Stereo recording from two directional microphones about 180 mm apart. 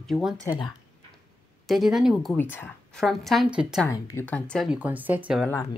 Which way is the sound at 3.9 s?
10° left (ahead or behind).